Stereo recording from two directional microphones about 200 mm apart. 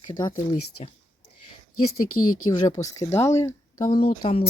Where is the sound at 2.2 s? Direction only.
90° left.